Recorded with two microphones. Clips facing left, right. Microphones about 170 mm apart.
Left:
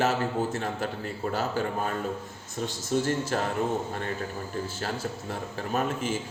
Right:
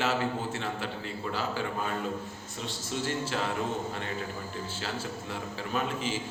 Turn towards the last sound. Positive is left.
turn(degrees=50)  # may be behind; listen again after turning